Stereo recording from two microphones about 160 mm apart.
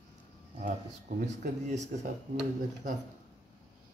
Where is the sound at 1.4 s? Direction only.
50° right (ahead or behind).